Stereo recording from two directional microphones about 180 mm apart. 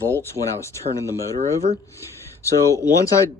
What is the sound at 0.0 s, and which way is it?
Speech, 15° left (ahead or behind).